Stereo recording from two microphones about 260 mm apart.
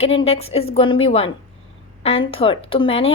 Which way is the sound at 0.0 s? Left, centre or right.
Left.